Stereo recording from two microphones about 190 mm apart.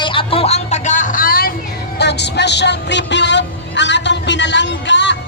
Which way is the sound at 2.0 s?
60° left (ahead or behind).